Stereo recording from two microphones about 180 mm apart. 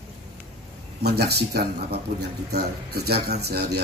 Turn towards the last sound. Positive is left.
turn(degrees=-60)  # may be behind; listen again after turning